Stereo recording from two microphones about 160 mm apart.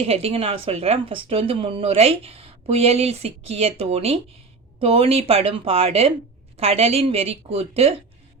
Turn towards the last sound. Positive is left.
turn(degrees=-40)  # may be behind; listen again after turning